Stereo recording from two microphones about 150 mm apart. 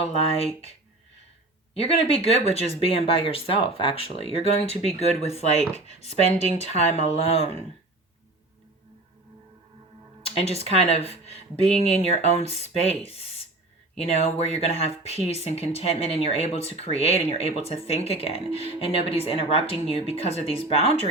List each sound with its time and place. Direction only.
0.0 s speech: 45° left (ahead or behind)
1.7 s speech: 40° left (ahead or behind)
10.2 s speech: 40° left (ahead or behind)